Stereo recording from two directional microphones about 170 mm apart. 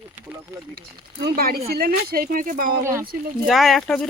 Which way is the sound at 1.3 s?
60° right (ahead or behind).